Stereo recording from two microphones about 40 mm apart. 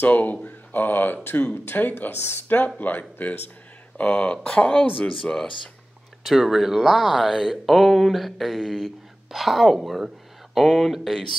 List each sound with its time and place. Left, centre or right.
0.1 s a sound: left
0.7 s speech: left
4.0 s speech: left
5.2 s speech: left
6.2 s speech: centre
6.8 s speech: centre